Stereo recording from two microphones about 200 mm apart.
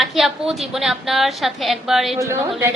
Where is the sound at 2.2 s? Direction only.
15° right (ahead or behind).